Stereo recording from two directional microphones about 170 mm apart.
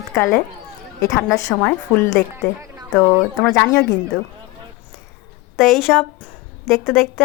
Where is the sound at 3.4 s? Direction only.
20° left (ahead or behind).